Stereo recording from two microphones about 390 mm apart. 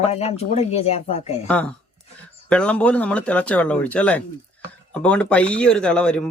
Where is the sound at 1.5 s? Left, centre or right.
Centre.